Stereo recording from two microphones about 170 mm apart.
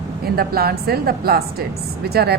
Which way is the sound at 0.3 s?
65° right (ahead or behind).